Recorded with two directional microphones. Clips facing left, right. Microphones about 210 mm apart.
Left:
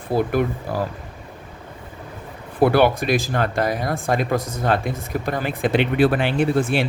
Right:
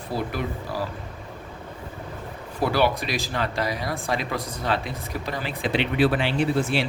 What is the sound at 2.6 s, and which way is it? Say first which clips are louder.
Speech: left 6 dB; 55° left (ahead or behind).